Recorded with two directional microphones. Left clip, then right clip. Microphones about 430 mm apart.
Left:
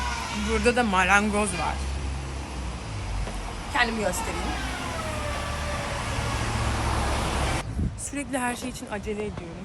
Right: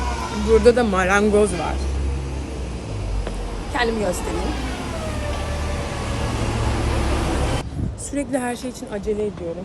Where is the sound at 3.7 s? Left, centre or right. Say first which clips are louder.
Right 3 dB; centre.